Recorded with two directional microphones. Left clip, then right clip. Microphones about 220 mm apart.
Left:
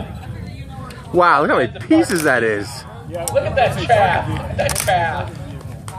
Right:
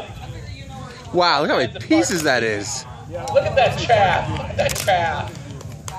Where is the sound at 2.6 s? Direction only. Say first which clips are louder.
Even; 30° right (ahead or behind).